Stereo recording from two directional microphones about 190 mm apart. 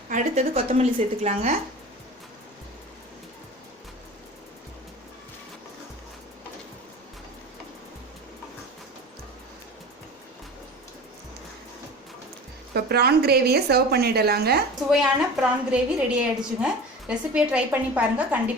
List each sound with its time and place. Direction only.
0.1 s a woman's voice: 40° right (ahead or behind)
12.7 s a woman's voice: 55° right (ahead or behind)
14.8 s a woman's voice: 5° right (ahead or behind)